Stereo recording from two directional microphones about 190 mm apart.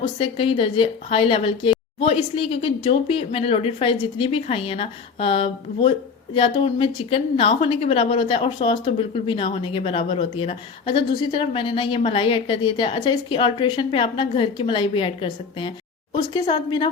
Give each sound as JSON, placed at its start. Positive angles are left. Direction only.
{"t": 0.0, "sound": "a woman's voice", "side_deg": 30}